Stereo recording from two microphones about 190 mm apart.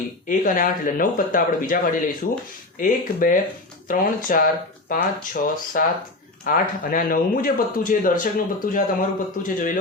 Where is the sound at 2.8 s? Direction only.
45° left (ahead or behind).